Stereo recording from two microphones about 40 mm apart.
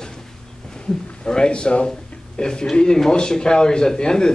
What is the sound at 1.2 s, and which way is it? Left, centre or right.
A man's voice, centre.